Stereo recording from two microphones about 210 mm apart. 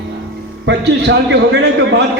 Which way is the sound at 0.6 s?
55° right (ahead or behind).